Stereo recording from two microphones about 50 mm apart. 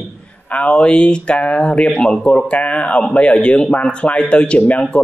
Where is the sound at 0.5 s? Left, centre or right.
Left.